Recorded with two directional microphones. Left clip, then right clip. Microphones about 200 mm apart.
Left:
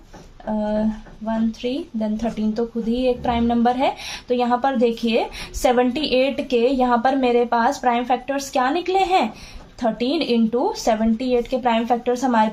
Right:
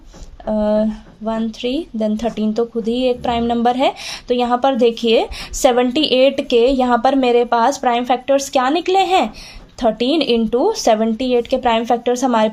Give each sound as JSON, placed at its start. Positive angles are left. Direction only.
{"t": 0.5, "sound": "speech", "side_deg": -45}